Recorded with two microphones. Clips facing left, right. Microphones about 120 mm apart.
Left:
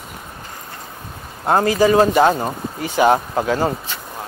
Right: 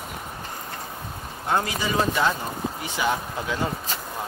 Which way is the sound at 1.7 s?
70° left (ahead or behind).